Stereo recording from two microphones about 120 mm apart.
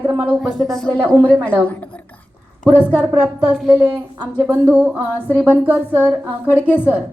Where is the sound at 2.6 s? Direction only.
15° right (ahead or behind).